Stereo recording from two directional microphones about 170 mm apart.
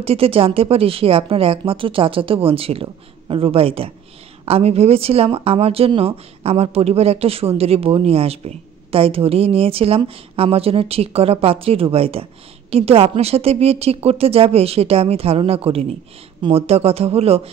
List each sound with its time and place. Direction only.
0.0 s speech: 35° right (ahead or behind)